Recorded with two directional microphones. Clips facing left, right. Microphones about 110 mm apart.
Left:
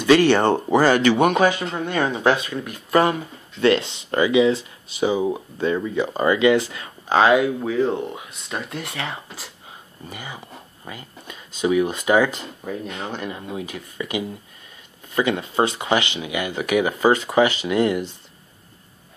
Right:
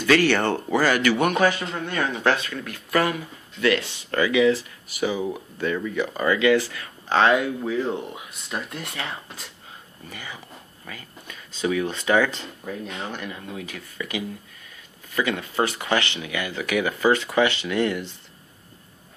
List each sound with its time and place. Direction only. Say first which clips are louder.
0.0 s speech: left 4 dB; 20° left (ahead or behind)
7.1 s speech: left 3 dB; 5° left (ahead or behind)
10.0 s speech: left 3 dB; 15° left (ahead or behind)
13.1 s speech: left 4 dB; 25° left (ahead or behind)